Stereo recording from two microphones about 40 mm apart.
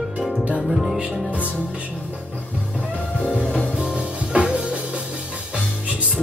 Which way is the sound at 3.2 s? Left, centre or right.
Left.